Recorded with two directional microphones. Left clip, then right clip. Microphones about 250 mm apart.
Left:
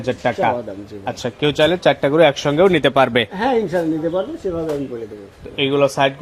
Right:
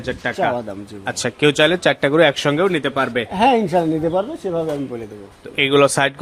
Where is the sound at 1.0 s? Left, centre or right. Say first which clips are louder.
Right 3 dB; centre.